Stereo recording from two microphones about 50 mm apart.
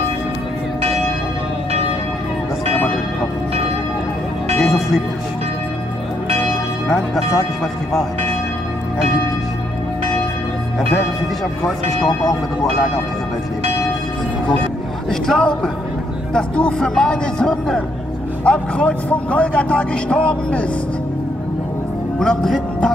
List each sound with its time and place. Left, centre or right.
4.6 s music: centre
15.0 s a man's voice: centre
22.2 s speech: centre